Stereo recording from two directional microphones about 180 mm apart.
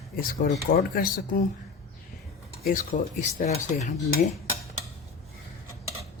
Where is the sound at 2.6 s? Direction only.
45° left (ahead or behind).